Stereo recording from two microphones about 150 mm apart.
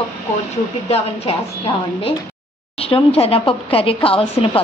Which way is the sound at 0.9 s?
40° left (ahead or behind).